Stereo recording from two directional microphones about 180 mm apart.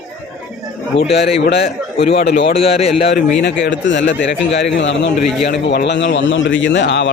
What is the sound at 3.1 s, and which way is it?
A man's voice, 75° left (ahead or behind).